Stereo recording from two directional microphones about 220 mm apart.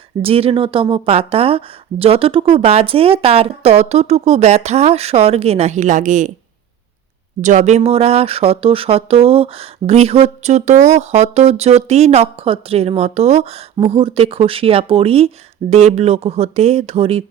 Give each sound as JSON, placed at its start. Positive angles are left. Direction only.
{"t": 0.2, "sound": "speech", "side_deg": -25}
{"t": 7.4, "sound": "speech", "side_deg": -35}